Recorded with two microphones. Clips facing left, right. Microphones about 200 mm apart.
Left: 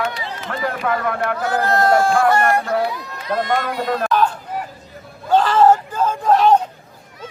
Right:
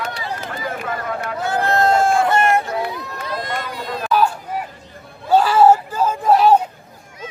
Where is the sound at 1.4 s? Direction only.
25° right (ahead or behind).